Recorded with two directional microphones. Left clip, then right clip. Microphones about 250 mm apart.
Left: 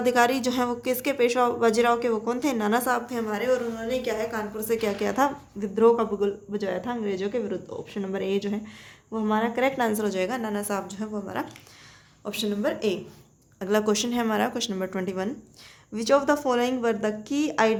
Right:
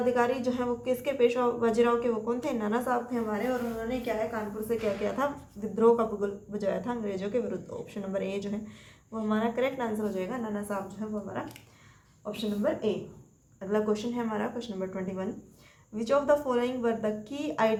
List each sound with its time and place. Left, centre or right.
0.0 s a woman's voice: left